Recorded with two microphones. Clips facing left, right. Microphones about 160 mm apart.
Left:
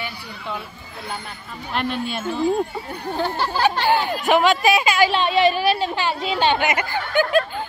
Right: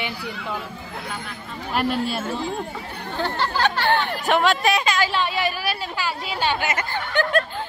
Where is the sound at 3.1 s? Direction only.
15° left (ahead or behind).